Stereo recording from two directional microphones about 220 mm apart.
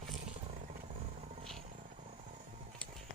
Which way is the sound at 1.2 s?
30° right (ahead or behind).